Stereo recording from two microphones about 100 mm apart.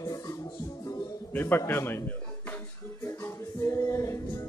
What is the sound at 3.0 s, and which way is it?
Music, 25° left (ahead or behind).